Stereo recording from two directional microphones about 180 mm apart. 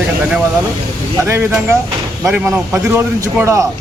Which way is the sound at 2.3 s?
5° right (ahead or behind).